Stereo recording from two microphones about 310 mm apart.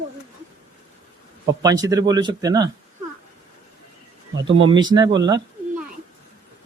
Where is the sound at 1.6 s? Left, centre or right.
Centre.